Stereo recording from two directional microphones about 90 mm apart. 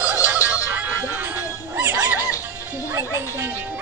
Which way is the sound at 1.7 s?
20° right (ahead or behind).